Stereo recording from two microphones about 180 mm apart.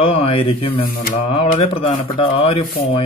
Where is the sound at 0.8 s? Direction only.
55° left (ahead or behind).